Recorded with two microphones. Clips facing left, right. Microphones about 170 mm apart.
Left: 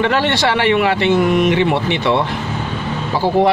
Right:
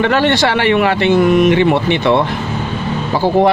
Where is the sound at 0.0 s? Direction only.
50° right (ahead or behind).